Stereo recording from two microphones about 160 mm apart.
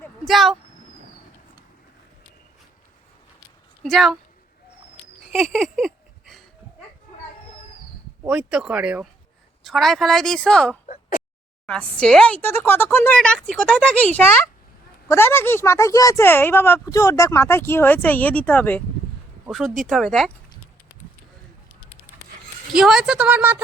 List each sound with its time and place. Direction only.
0.3 s a woman's voice: centre (ahead or behind)
3.8 s a woman's voice: centre (ahead or behind)
5.3 s a sound: centre (ahead or behind)
8.3 s a woman's voice: 5° right (ahead or behind)
10.8 s a sound: 60° left (ahead or behind)
11.6 s a woman's voice: 5° left (ahead or behind)
22.7 s a woman's voice: 5° right (ahead or behind)